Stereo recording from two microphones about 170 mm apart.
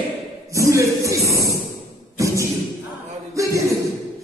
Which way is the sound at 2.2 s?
20° right (ahead or behind).